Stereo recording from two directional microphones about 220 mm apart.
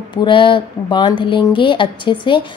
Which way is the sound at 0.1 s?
20° left (ahead or behind).